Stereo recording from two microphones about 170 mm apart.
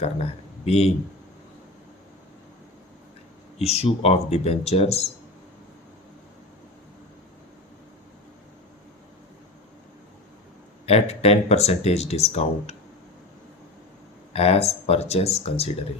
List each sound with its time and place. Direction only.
0.0 s speech: 35° left (ahead or behind)
3.6 s speech: 35° left (ahead or behind)
10.8 s speech: 40° left (ahead or behind)
14.3 s speech: 35° left (ahead or behind)